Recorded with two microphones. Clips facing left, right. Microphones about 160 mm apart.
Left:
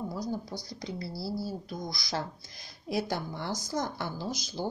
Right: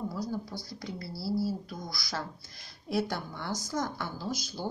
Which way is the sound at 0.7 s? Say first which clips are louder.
Left 3 dB; 15° left (ahead or behind).